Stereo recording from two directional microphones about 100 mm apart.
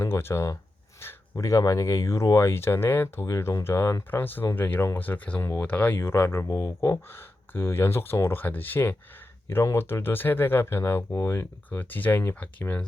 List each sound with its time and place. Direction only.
0.0 s speech: 25° left (ahead or behind)
6.4 s speech: 35° left (ahead or behind); by 12.8 s 15° left (ahead or behind)